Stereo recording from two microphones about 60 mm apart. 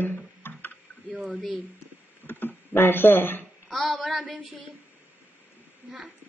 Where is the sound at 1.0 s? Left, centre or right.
Centre.